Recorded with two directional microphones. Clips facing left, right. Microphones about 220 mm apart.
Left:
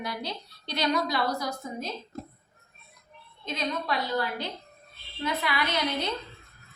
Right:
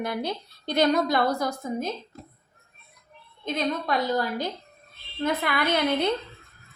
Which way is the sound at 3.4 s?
50° right (ahead or behind).